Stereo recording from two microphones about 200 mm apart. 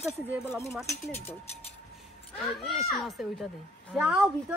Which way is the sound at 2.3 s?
Centre (ahead or behind).